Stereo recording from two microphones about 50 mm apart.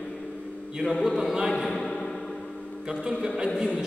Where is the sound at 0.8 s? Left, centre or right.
Left.